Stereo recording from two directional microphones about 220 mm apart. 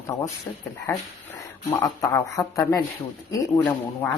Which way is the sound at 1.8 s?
15° left (ahead or behind).